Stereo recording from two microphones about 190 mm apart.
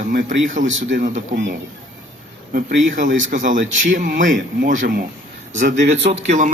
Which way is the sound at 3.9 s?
45° right (ahead or behind).